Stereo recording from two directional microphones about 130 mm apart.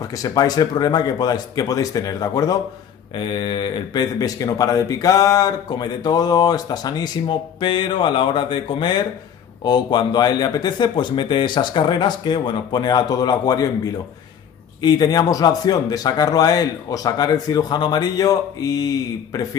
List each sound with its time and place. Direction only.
0.2 s a man's voice: 30° left (ahead or behind)
14.8 s a man's voice: 30° left (ahead or behind)